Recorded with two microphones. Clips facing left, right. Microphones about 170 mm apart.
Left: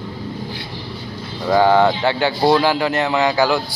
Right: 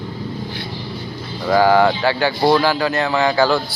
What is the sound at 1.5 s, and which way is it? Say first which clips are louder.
Speech: even; 20° left (ahead or behind).